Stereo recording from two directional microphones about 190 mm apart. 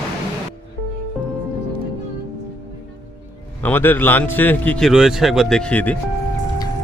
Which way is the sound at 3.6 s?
10° left (ahead or behind).